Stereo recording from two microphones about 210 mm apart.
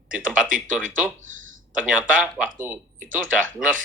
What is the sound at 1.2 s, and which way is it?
Speech, 70° right (ahead or behind).